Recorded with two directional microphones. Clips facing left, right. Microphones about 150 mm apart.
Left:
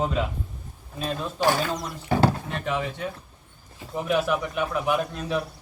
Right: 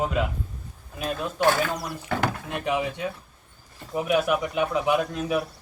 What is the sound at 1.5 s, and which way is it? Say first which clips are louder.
Speech: right 1 dB; 20° left (ahead or behind).